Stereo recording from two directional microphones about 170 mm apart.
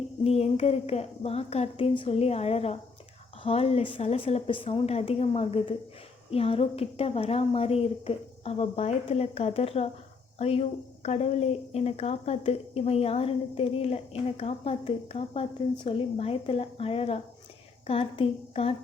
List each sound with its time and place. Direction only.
0.3 s a woman's voice: 40° left (ahead or behind)